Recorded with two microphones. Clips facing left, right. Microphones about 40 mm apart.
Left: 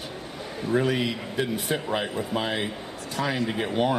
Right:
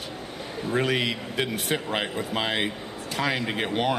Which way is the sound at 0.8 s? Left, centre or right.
Right.